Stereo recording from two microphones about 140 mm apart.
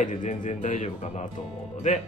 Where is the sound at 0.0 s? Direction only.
60° left (ahead or behind).